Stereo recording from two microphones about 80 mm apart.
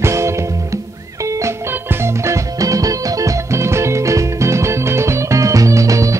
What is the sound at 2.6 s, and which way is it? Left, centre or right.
Music, right.